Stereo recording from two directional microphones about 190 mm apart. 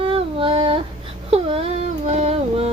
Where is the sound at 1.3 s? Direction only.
30° right (ahead or behind).